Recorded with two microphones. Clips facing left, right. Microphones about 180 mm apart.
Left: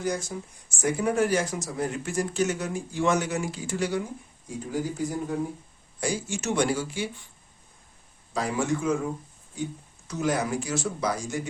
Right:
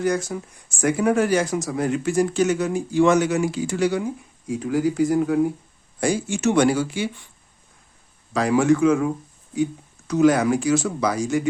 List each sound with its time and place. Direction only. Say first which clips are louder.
0.0 s speech: right 7 dB; 70° right (ahead or behind); by 5.4 s 90° right
6.0 s speech: right 8 dB; 60° right (ahead or behind); by 7.1 s 75° right (ahead or behind)
8.3 s speech: right 9 dB; 80° right
10.1 s speech: right 10 dB; 85° right